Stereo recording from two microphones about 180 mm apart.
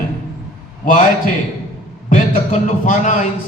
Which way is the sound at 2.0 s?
45° left (ahead or behind).